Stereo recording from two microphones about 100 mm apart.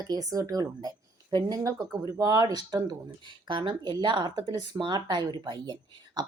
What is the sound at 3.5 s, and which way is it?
Speech, 55° right (ahead or behind).